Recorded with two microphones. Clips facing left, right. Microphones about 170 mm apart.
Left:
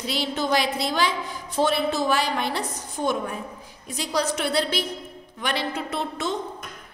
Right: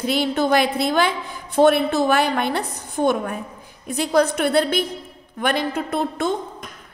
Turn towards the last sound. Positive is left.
turn(degrees=-50)  # may be behind; listen again after turning